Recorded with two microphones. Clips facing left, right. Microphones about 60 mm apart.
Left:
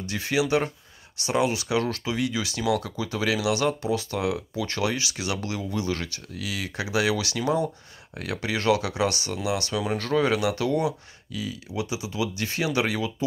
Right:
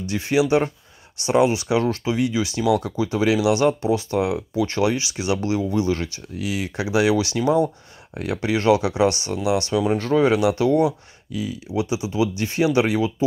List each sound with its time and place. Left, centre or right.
0.0 s speech: right